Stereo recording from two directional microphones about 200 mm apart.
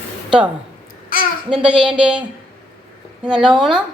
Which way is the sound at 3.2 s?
5° right (ahead or behind).